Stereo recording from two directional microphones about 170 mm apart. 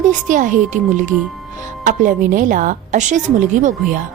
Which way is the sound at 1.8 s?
50° right (ahead or behind).